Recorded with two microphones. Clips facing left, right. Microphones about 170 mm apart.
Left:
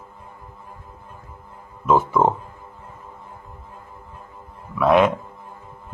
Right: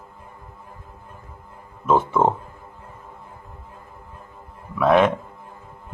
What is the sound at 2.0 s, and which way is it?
Speech, 25° right (ahead or behind).